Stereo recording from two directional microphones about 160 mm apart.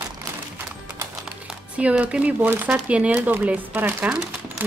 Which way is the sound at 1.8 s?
10° right (ahead or behind).